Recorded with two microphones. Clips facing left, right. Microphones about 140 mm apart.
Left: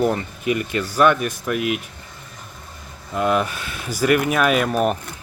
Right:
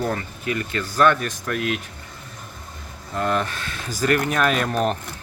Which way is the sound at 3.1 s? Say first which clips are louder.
Left 3 dB; 10° left (ahead or behind).